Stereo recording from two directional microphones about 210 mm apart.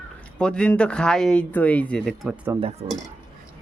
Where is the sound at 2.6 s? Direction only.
30° right (ahead or behind).